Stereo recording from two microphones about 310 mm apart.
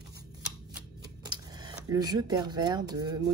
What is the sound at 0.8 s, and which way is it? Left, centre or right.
Speech, centre.